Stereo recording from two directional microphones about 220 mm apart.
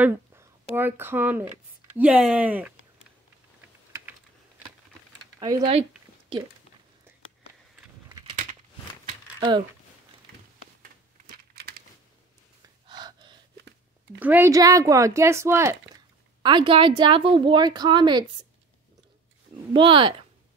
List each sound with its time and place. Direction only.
0.0 s speech: 10° right (ahead or behind)
5.4 s speech: 15° right (ahead or behind)
9.4 s speech: 20° right (ahead or behind)
12.8 s gasp: 20° right (ahead or behind)
14.2 s speech: 10° right (ahead or behind)
16.4 s speech: 25° right (ahead or behind)
19.7 s speech: 20° right (ahead or behind)